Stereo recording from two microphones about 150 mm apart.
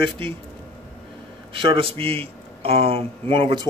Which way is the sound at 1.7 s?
35° right (ahead or behind).